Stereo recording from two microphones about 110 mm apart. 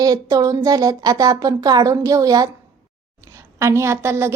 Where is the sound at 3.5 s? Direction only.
25° right (ahead or behind).